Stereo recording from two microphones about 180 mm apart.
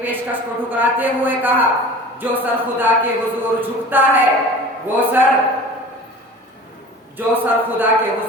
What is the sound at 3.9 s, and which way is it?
A man's voice, 10° right (ahead or behind).